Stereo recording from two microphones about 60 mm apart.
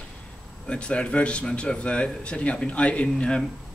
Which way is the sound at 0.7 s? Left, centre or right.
Centre.